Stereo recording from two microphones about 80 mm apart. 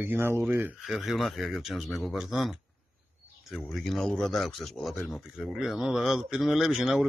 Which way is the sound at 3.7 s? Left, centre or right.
Centre.